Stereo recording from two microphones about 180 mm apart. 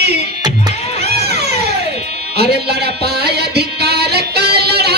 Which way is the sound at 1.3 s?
65° right (ahead or behind).